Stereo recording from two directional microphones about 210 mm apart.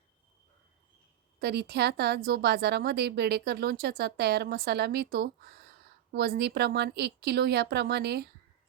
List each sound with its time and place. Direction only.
1.4 s a woman's voice: 50° right (ahead or behind)